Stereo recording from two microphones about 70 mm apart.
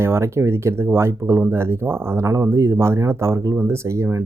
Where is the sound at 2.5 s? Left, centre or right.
Right.